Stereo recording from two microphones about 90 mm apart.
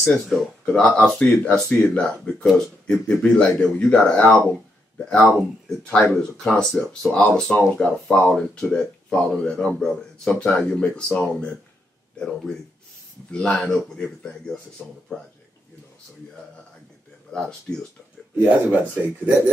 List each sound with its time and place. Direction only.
0.0 s speech: 10° left (ahead or behind)
4.5 s a sound: 20° left (ahead or behind)
5.9 s speech: 10° left (ahead or behind)
17.3 s speech: 5° left (ahead or behind)
18.4 s speech: 15° right (ahead or behind)